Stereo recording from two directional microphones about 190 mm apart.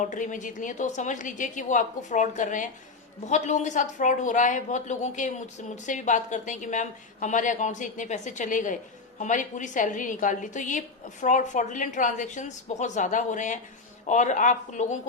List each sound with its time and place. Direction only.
0.0 s speech: 40° left (ahead or behind)